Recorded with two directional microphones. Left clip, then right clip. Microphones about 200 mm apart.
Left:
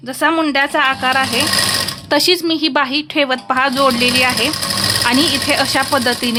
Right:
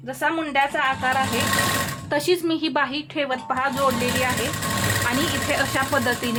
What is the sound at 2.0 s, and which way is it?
Speech, 35° left (ahead or behind).